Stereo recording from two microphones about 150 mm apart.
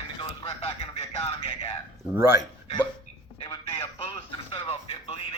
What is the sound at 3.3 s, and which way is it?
Music, 35° left (ahead or behind).